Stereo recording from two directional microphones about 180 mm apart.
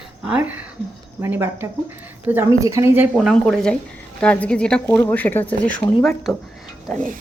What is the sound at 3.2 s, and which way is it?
Speech, centre (ahead or behind).